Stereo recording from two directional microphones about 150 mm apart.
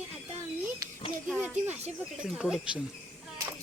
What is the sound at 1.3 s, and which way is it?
Speech, centre (ahead or behind).